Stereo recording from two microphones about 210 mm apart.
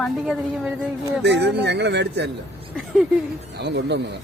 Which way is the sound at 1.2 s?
55° right (ahead or behind).